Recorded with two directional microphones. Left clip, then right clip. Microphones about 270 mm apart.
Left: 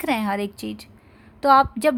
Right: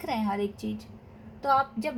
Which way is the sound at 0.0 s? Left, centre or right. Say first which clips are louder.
Left 6 dB; left.